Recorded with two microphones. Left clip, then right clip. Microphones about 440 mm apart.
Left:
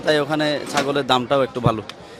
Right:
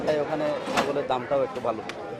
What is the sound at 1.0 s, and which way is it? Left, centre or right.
Speech, left.